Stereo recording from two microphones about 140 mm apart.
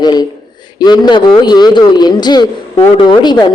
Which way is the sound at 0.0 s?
30° left (ahead or behind).